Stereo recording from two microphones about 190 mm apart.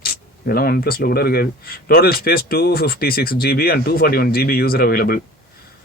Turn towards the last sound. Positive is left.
turn(degrees=55)  # may be behind; listen again after turning